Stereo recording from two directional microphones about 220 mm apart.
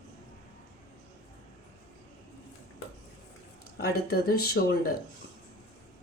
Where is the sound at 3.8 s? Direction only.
45° left (ahead or behind).